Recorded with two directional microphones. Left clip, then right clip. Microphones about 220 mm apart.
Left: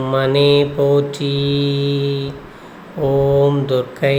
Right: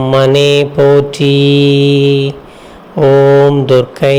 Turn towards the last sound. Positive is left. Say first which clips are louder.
# right 8 dB
turn(degrees=-30)  # may be behind; listen again after turning